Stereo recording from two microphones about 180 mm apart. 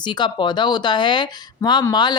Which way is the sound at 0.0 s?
25° left (ahead or behind).